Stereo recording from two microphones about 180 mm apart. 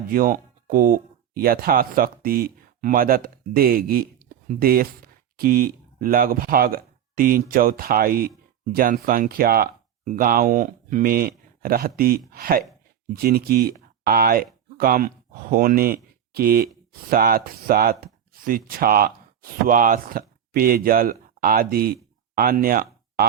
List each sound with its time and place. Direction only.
0.1 s speech: 50° right (ahead or behind)